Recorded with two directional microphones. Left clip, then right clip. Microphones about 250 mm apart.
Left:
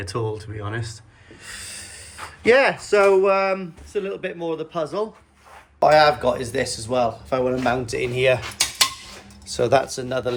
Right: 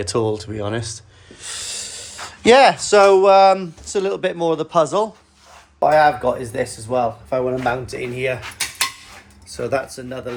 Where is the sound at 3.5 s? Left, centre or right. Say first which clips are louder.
Right 7 dB; right.